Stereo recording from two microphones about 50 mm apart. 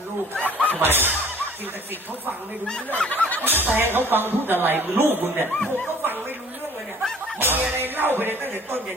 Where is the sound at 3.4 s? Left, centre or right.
Right.